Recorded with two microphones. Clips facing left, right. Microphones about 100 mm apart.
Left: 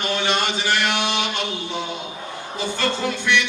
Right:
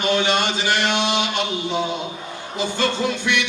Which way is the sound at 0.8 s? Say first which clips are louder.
Right 2 dB; 20° right (ahead or behind).